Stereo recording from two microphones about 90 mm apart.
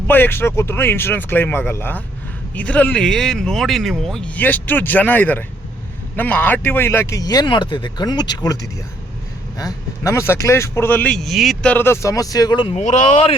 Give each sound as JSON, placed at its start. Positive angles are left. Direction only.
{"t": 0.1, "sound": "speech", "side_deg": 25}
{"t": 4.4, "sound": "speech", "side_deg": 20}
{"t": 7.2, "sound": "speech", "side_deg": 45}
{"t": 9.6, "sound": "speech", "side_deg": 35}
{"t": 11.1, "sound": "speech", "side_deg": 0}
{"t": 11.6, "sound": "speech", "side_deg": 20}
{"t": 12.0, "sound": "speech", "side_deg": 40}